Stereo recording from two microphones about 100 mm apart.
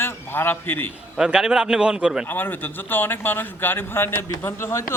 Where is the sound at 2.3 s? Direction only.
20° left (ahead or behind).